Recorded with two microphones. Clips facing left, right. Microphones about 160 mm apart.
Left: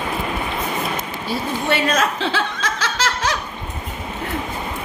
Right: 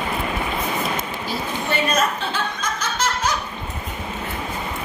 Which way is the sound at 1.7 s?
90° left.